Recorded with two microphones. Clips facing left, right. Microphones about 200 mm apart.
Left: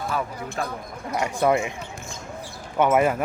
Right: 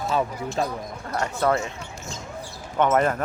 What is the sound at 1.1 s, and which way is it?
Speech, 15° left (ahead or behind).